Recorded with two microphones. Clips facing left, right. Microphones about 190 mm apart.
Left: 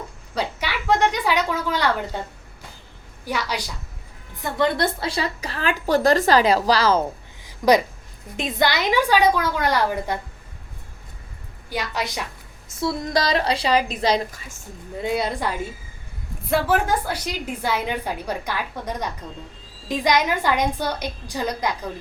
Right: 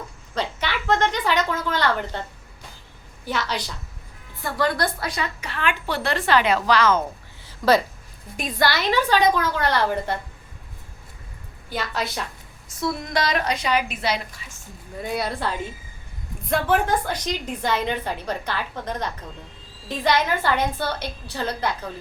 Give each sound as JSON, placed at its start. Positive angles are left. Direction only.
{"t": 0.3, "sound": "a woman's voice", "side_deg": 10}
{"t": 3.2, "sound": "a woman's voice", "side_deg": 10}
{"t": 7.4, "sound": "a sound", "side_deg": 15}
{"t": 8.4, "sound": "a woman's voice", "side_deg": 20}
{"t": 11.7, "sound": "a woman's voice", "side_deg": 15}
{"t": 12.6, "sound": "a woman's voice", "side_deg": 30}
{"t": 15.0, "sound": "a woman's voice", "side_deg": 20}
{"t": 16.5, "sound": "a woman's voice", "side_deg": 5}